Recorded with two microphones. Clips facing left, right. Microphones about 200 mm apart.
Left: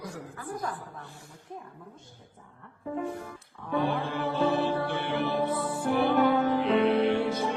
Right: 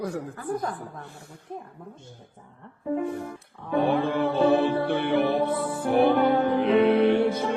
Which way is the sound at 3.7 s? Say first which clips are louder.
Right 6 dB; 55° right (ahead or behind).